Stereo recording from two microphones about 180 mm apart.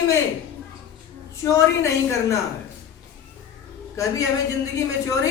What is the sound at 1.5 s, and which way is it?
Speech, 15° left (ahead or behind).